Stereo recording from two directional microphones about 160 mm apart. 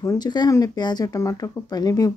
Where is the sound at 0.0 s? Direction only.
25° left (ahead or behind).